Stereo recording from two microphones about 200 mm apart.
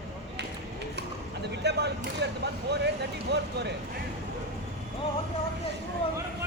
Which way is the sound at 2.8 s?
55° right (ahead or behind).